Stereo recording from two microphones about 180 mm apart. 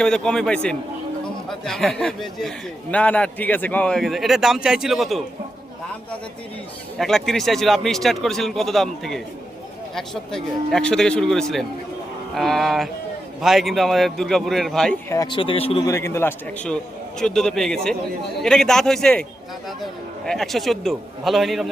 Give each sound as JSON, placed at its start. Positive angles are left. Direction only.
{"t": 0.0, "sound": "a man's voice", "side_deg": 5}
{"t": 7.0, "sound": "a man's voice", "side_deg": 0}
{"t": 15.1, "sound": "a man's voice", "side_deg": 20}
{"t": 15.4, "sound": "a man's voice", "side_deg": 30}
{"t": 15.9, "sound": "a man's voice", "side_deg": 15}
{"t": 17.2, "sound": "a man's voice", "side_deg": 5}
{"t": 20.2, "sound": "a man's voice", "side_deg": 0}